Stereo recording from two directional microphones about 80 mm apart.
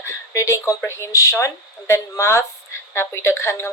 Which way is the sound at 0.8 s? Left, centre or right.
Left.